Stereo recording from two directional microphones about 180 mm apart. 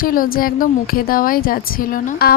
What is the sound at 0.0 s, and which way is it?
A woman's voice, 50° left (ahead or behind).